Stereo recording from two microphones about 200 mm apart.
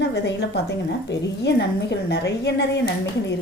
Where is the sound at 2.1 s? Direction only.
60° left (ahead or behind).